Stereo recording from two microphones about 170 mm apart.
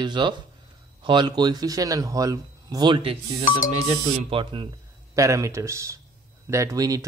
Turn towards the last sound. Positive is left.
turn(degrees=-20)  # may be behind; listen again after turning